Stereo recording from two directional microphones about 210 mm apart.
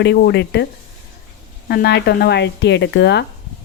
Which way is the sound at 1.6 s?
50° left (ahead or behind).